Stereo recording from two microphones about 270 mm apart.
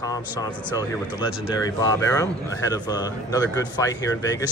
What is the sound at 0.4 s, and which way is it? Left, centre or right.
Speech, centre.